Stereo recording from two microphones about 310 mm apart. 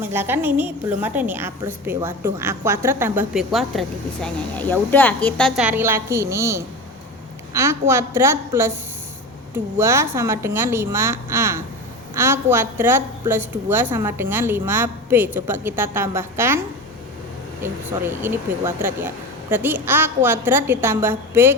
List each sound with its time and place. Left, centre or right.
0.0 s a woman's voice: centre
9.7 s a woman's voice: centre